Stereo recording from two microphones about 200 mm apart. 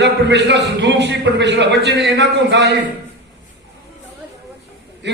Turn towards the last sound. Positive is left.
turn(degrees=-60)  # may be behind; listen again after turning